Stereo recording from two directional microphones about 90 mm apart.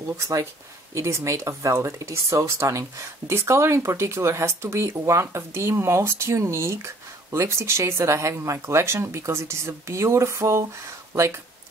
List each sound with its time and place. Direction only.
0.2 s speech: 35° right (ahead or behind)